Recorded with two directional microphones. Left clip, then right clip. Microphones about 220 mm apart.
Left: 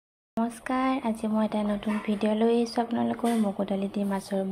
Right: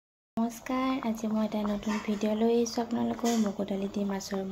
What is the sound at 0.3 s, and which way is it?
Speech, 10° left (ahead or behind).